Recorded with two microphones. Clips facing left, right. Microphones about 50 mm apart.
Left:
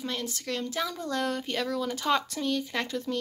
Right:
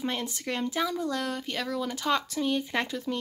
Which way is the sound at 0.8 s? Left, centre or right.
Centre.